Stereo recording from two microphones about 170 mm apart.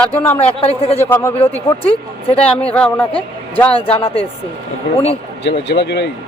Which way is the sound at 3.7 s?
35° left (ahead or behind).